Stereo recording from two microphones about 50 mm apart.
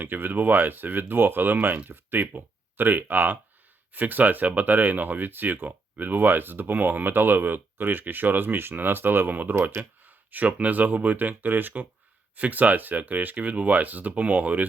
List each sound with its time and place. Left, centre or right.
0.0 s speech: right